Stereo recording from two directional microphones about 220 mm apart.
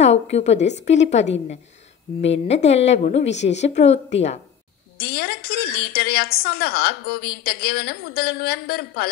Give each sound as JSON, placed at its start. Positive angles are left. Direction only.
{"t": 0.0, "sound": "a woman's voice", "side_deg": 30}
{"t": 2.2, "sound": "a woman's voice", "side_deg": 30}
{"t": 4.9, "sound": "a woman's voice", "side_deg": 45}